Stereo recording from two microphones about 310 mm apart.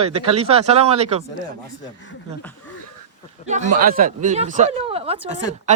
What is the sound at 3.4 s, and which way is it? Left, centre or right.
Speech, right.